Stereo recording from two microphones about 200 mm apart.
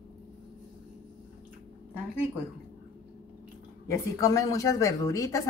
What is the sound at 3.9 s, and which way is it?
A woman's voice, 15° left (ahead or behind).